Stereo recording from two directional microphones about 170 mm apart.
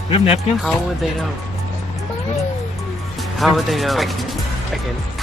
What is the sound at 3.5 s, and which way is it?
Speech, centre (ahead or behind).